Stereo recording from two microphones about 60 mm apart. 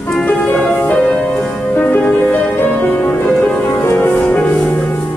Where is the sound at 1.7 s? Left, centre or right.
Left.